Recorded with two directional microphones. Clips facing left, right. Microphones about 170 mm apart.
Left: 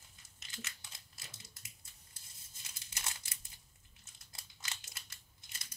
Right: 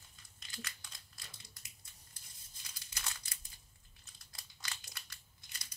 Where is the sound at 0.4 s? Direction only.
25° left (ahead or behind).